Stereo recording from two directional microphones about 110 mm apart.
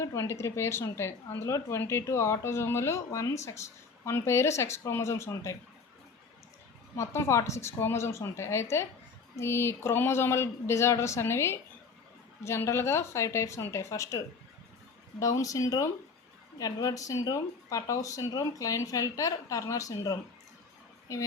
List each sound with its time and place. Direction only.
0.0 s speech: 25° left (ahead or behind)
6.9 s speech: 25° left (ahead or behind)
15.2 s speech: 30° left (ahead or behind)